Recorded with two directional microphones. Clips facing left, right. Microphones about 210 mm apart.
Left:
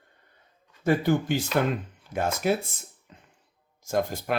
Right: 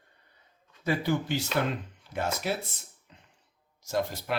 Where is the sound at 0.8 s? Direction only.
50° left (ahead or behind).